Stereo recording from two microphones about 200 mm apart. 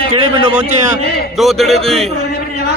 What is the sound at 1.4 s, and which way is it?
Speech, centre (ahead or behind).